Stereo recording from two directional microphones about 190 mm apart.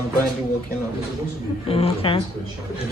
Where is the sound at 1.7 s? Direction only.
30° left (ahead or behind).